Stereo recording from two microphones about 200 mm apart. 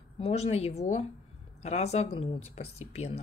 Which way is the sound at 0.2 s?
30° left (ahead or behind).